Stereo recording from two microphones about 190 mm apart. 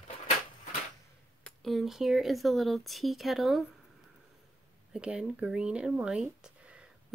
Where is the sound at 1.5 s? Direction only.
Centre (ahead or behind).